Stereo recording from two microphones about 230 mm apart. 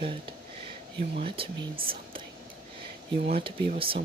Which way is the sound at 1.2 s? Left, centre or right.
Right.